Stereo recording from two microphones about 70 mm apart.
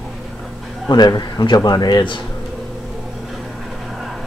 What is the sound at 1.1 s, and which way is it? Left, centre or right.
Speech, left.